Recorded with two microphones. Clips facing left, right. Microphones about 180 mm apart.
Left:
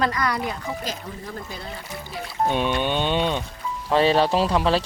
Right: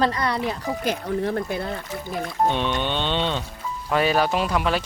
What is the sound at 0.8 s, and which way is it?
Speech, 65° right (ahead or behind).